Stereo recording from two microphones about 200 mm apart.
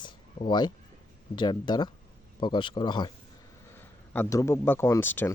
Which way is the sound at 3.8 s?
10° left (ahead or behind).